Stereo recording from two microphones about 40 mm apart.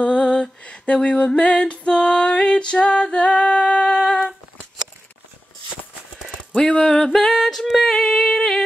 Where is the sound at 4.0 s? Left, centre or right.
Left.